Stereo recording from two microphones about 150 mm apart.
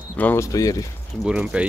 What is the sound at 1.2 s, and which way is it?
Speech, 5° right (ahead or behind).